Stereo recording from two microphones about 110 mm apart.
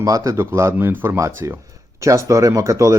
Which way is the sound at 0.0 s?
30° right (ahead or behind).